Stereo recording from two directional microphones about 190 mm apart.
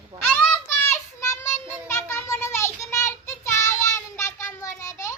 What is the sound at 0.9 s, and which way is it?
Child singing, 15° left (ahead or behind).